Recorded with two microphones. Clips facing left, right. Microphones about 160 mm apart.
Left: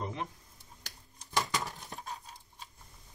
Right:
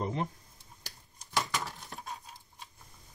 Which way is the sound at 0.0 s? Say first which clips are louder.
Right 4 dB; 35° right (ahead or behind).